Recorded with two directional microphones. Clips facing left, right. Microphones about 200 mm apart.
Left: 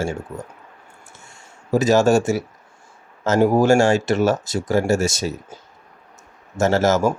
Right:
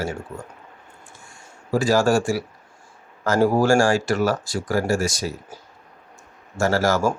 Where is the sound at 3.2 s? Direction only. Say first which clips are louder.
Left 2 dB; 20° left (ahead or behind).